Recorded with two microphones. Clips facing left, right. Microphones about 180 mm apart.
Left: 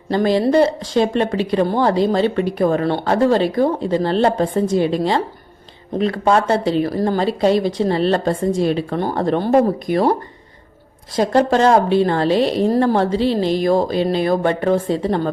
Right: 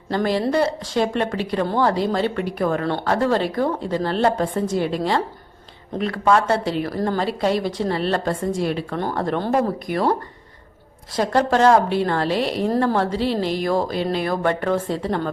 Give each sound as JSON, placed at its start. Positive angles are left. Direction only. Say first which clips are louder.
{"t": 0.1, "sound": "speech", "louder": "left 5 dB", "side_deg": 20}
{"t": 11.2, "sound": "speech", "louder": "left 3 dB", "side_deg": 20}